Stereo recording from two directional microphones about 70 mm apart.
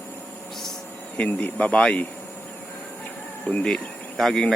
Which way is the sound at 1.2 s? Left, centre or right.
Left.